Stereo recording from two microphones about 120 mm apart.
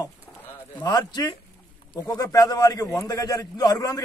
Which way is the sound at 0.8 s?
35° left (ahead or behind).